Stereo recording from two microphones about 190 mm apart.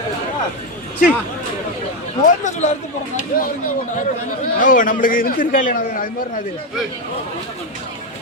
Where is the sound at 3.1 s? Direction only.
45° left (ahead or behind).